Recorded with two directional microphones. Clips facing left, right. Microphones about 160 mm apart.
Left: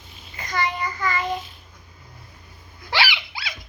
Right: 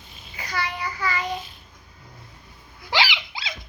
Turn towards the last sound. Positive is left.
turn(degrees=-20)  # may be behind; listen again after turning